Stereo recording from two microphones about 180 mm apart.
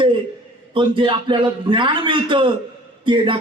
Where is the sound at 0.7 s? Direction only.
30° right (ahead or behind).